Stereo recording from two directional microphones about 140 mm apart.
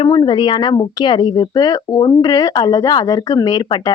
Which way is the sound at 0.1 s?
30° left (ahead or behind).